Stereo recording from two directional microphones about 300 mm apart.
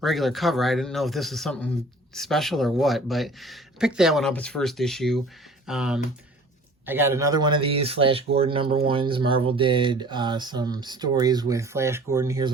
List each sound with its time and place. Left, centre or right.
0.0 s speech: centre